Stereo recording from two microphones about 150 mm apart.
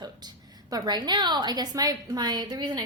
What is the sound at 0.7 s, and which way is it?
A woman's voice, 25° right (ahead or behind).